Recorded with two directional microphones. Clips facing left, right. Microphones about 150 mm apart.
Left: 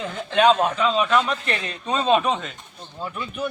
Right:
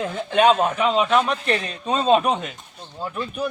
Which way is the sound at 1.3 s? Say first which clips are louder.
Right 3 dB; 35° right (ahead or behind).